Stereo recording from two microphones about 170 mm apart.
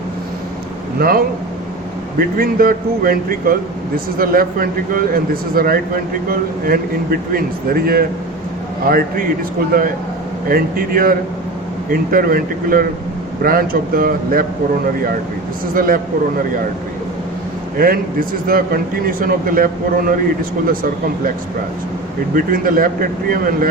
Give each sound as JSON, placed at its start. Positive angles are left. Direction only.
{"t": 0.9, "sound": "a man's voice", "side_deg": -60}
{"t": 10.5, "sound": "a man's voice", "side_deg": -60}
{"t": 15.7, "sound": "a man's voice", "side_deg": -55}
{"t": 17.7, "sound": "a man's voice", "side_deg": -55}
{"t": 22.4, "sound": "a man's voice", "side_deg": -55}